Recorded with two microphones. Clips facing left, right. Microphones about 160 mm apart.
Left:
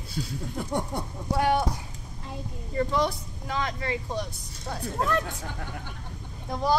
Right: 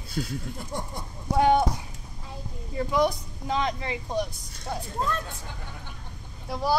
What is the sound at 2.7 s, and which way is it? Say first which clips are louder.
A woman's voice: right 1 dB; 10° right (ahead or behind).